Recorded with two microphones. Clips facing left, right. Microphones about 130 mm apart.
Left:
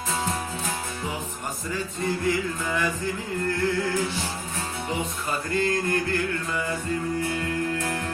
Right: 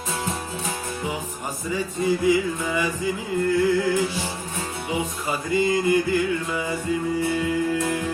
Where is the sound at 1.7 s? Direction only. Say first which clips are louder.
Right 6 dB; 5° right (ahead or behind).